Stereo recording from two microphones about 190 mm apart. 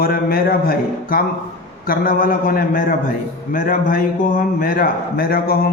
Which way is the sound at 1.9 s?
50° left (ahead or behind).